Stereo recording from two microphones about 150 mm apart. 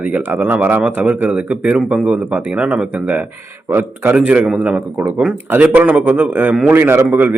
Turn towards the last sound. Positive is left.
turn(degrees=-10)  # may be behind; listen again after turning